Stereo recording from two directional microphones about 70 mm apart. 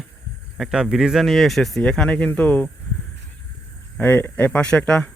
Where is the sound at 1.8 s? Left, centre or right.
Centre.